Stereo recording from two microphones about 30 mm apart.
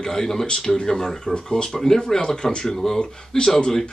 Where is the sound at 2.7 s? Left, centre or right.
Centre.